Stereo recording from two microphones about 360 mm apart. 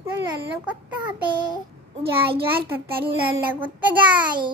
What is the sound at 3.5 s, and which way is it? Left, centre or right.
Speech, centre.